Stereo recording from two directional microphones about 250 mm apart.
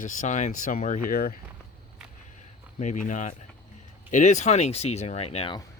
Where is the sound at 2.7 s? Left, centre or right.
Left.